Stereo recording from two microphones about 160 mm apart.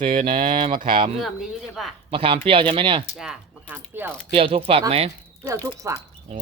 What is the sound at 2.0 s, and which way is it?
Speech, 35° right (ahead or behind).